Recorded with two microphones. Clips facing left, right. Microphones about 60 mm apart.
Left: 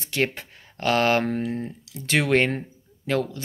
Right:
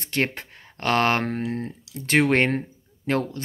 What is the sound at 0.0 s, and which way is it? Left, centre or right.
Speech, right.